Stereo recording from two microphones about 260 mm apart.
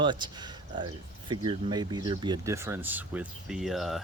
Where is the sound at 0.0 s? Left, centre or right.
Centre.